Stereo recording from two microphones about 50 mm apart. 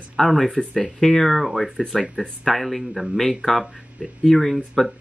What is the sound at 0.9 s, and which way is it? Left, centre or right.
Speech, centre.